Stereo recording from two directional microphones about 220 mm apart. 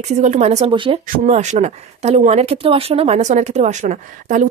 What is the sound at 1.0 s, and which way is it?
Speech, 35° right (ahead or behind).